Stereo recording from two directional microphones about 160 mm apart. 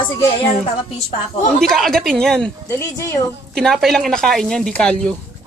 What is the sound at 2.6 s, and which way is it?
Speech, 20° left (ahead or behind).